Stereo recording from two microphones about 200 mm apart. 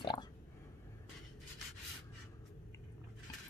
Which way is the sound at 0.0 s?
20° left (ahead or behind).